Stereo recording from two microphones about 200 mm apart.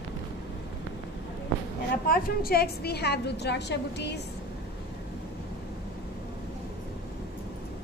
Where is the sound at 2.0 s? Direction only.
50° left (ahead or behind).